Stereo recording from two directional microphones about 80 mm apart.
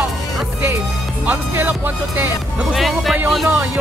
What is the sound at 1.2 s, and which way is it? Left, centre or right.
Speech, right.